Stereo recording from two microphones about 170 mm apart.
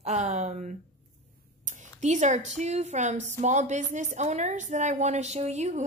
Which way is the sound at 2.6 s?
40° right (ahead or behind).